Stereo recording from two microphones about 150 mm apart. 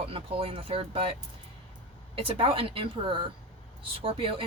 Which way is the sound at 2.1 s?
40° right (ahead or behind).